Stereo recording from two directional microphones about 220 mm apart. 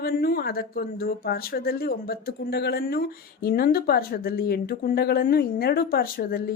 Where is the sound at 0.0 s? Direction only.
45° left (ahead or behind).